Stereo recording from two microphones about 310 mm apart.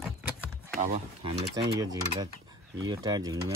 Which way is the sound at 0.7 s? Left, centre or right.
Centre.